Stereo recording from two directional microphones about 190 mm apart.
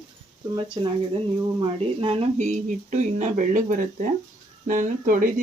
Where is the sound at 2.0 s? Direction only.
30° right (ahead or behind).